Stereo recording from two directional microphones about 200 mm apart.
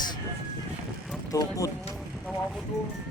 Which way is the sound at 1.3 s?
15° left (ahead or behind).